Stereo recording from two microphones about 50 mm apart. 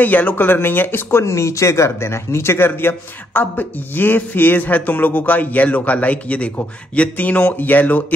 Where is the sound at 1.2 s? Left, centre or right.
Left.